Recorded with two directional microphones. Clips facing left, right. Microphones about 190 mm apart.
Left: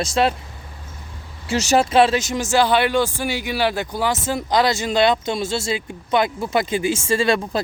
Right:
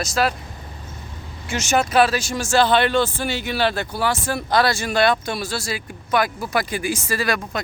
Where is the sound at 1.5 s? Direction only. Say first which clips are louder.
Left 3 dB; 35° left (ahead or behind).